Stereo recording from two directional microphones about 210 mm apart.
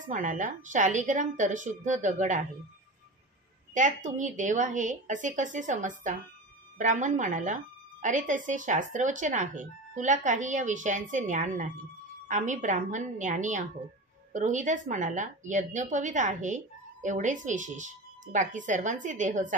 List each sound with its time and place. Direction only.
0.1 s speech: 35° right (ahead or behind)
3.7 s speech: 35° right (ahead or behind)